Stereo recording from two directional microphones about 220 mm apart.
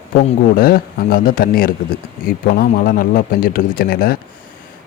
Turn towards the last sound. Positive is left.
turn(degrees=40)  # may be behind; listen again after turning